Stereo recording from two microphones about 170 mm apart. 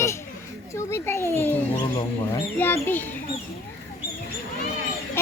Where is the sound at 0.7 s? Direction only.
15° left (ahead or behind).